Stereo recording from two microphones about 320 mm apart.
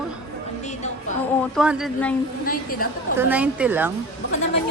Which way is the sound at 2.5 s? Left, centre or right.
Left.